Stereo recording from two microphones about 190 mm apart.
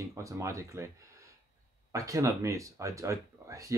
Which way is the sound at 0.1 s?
15° right (ahead or behind).